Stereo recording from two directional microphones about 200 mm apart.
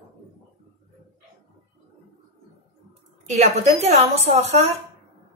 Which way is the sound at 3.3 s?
35° right (ahead or behind).